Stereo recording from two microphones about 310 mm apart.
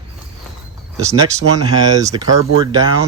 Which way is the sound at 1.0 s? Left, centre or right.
Centre.